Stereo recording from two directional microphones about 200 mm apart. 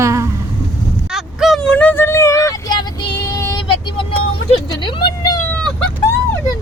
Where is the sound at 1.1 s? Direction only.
Centre (ahead or behind); by 4.0 s 25° left (ahead or behind).